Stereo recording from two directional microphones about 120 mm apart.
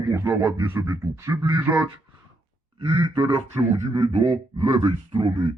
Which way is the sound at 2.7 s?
45° right (ahead or behind).